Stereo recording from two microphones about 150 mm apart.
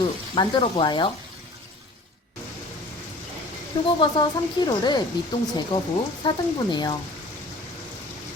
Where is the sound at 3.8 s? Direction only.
25° left (ahead or behind).